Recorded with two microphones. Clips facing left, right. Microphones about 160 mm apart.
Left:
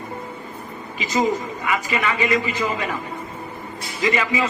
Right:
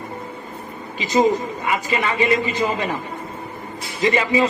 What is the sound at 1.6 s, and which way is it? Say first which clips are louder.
A man's voice: even; 30° right (ahead or behind).